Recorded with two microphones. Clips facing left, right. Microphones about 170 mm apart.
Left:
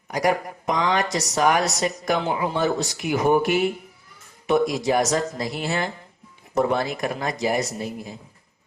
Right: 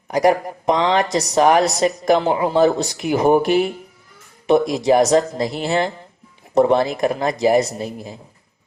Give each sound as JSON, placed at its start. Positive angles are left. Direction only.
{"t": 0.1, "sound": "speech", "side_deg": -25}